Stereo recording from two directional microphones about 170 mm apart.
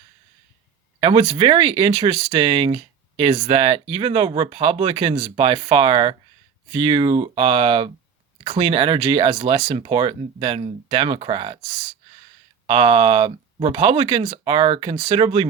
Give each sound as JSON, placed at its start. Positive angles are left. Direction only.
{"t": 0.9, "sound": "speech", "side_deg": -30}